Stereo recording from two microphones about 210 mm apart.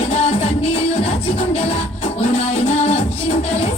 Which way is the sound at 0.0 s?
30° left (ahead or behind).